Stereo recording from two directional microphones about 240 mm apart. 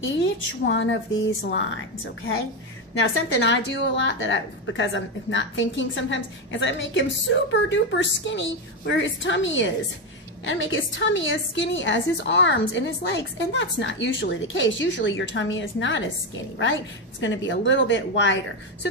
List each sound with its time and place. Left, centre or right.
0.0 s a woman's voice: left
3.0 s a woman's voice: left